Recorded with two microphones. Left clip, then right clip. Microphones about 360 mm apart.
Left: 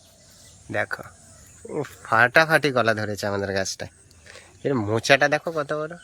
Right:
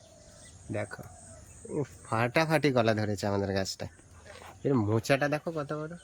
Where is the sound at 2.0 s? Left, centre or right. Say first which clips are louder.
Left 11 dB; centre.